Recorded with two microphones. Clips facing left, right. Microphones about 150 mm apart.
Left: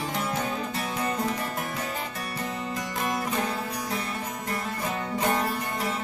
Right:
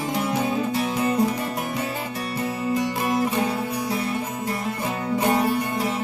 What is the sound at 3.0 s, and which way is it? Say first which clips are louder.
Music: right 4 dB; 5° right (ahead or behind).